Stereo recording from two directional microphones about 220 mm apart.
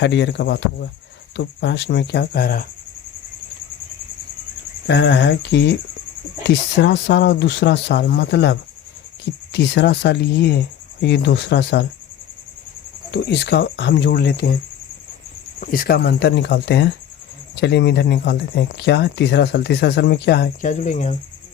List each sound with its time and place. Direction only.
0.0 s speech: 50° left (ahead or behind)
4.9 s speech: 50° left (ahead or behind)
13.1 s speech: 50° left (ahead or behind)
15.6 s speech: 40° left (ahead or behind)